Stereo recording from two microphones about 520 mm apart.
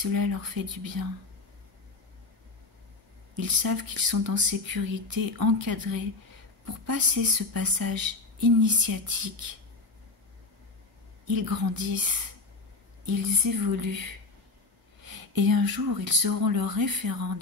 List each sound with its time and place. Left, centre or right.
0.0 s speech: right
3.3 s speech: right
11.2 s speech: right
15.0 s speech: right